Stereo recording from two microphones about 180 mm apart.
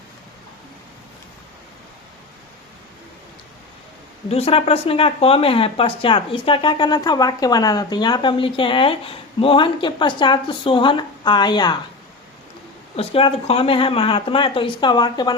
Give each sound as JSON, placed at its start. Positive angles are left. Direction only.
{"t": 4.3, "sound": "speech", "side_deg": 35}
{"t": 13.0, "sound": "speech", "side_deg": 30}